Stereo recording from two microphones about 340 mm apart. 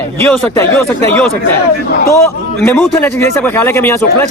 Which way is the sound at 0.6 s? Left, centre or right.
Centre.